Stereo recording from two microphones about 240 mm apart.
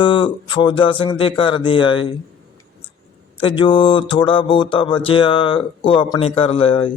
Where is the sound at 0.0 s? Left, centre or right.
Centre.